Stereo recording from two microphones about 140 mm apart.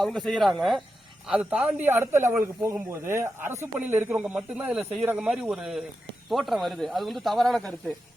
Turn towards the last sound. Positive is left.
turn(degrees=0)  # may be behind; listen again after turning